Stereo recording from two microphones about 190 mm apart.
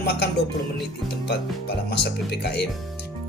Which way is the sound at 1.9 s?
55° left (ahead or behind).